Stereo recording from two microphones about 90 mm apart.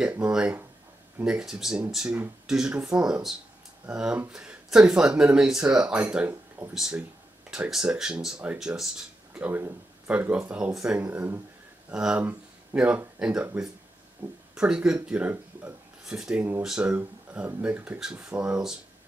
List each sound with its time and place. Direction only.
0.3 s speech: 10° right (ahead or behind)
9.3 s speech: 20° right (ahead or behind)
11.1 s speech: 20° right (ahead or behind)
11.9 s speech: 10° right (ahead or behind)
14.5 s speech: 10° right (ahead or behind)